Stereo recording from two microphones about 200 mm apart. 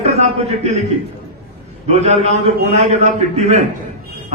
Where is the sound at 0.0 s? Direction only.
35° right (ahead or behind).